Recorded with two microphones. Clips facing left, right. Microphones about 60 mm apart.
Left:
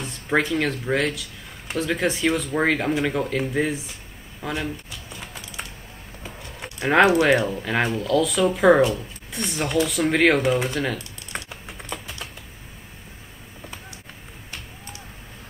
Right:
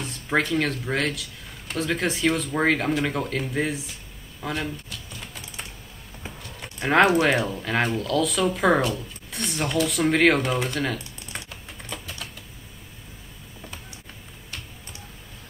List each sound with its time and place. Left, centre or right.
0.0 s speech: centre
4.4 s a sound: centre
6.8 s speech: centre
11.3 s typing: left